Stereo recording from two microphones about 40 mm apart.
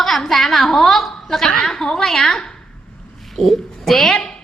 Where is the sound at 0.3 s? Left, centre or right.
Centre.